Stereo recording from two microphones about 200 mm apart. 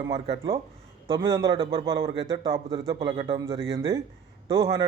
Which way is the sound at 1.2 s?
15° right (ahead or behind).